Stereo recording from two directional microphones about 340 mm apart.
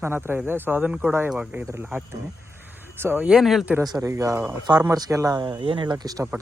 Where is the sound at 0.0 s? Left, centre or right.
Centre.